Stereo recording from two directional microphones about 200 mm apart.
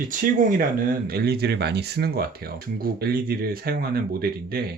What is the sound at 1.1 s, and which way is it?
Speech, 50° right (ahead or behind).